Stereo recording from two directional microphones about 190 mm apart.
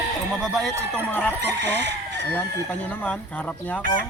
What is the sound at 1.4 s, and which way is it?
Speech, 65° right (ahead or behind).